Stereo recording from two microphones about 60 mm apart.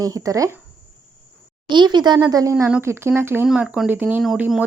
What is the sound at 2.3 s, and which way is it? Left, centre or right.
Speech, right.